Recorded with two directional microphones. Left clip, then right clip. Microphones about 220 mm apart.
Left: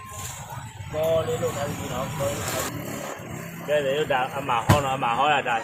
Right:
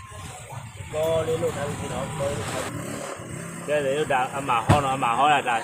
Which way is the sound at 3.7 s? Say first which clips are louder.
Even; 10° right (ahead or behind).